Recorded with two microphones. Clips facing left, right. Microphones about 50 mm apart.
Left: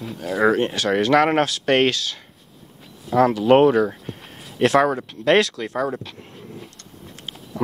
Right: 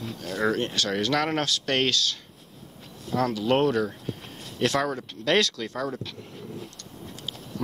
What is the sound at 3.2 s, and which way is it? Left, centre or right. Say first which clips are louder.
Speech: left 9 dB; left.